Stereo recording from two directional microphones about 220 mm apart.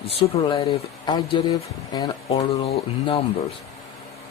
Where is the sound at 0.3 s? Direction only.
25° left (ahead or behind).